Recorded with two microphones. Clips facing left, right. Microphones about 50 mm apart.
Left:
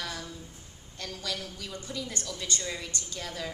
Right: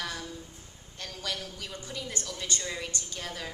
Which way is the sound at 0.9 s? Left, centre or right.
Right.